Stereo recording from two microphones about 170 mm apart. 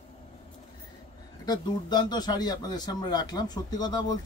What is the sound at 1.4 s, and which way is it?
A man's voice, 25° left (ahead or behind).